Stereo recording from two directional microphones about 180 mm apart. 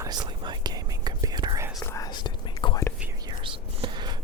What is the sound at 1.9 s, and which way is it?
Whispering, 20° left (ahead or behind).